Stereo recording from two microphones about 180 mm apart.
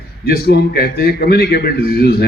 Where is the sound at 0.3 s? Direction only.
60° left (ahead or behind).